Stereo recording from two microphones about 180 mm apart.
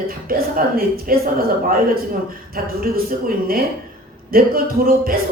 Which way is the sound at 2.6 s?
55° right (ahead or behind).